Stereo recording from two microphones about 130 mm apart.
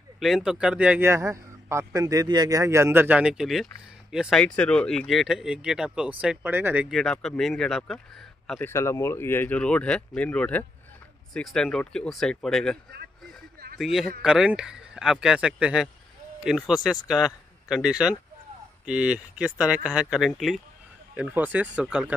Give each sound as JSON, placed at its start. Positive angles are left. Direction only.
{"t": 0.2, "sound": "a man's voice", "side_deg": -5}
{"t": 4.4, "sound": "speech", "side_deg": 10}
{"t": 6.2, "sound": "a man's voice", "side_deg": -15}
{"t": 6.9, "sound": "speech", "side_deg": 5}
{"t": 8.5, "sound": "speech", "side_deg": 20}
{"t": 13.2, "sound": "a sound", "side_deg": 0}
{"t": 14.2, "sound": "a man's voice", "side_deg": -5}
{"t": 21.2, "sound": "a man's voice", "side_deg": -10}